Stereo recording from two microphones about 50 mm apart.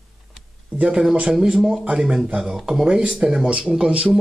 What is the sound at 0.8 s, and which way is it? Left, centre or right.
A man's voice, centre.